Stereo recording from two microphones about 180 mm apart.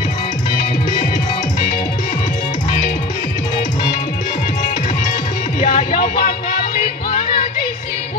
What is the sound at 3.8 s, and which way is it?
Music, 55° left (ahead or behind).